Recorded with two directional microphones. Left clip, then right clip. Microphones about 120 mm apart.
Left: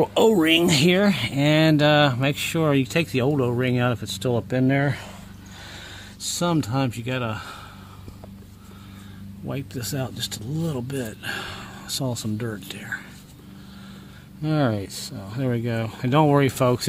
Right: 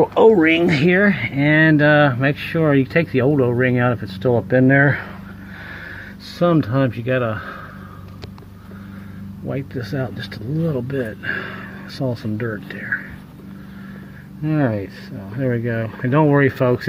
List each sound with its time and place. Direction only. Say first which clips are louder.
0.2 s speech: right 7 dB; 50° left (ahead or behind)
0.7 s speech: right 4 dB; 35° left (ahead or behind)
4.3 s speech: right 8 dB; 10° left (ahead or behind)
6.3 s speech: right 7 dB; 15° left (ahead or behind)
9.5 s speech: right 5 dB; 30° left (ahead or behind)
14.4 s speech: right 3 dB; 60° left (ahead or behind)
15.3 s speech: right 5 dB; 50° left (ahead or behind)